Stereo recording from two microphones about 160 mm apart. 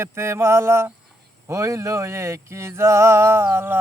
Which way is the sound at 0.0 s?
15° right (ahead or behind).